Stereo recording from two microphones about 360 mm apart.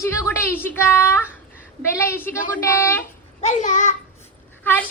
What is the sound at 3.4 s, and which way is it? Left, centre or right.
Speech, centre.